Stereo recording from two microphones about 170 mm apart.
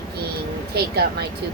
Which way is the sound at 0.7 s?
70° right (ahead or behind).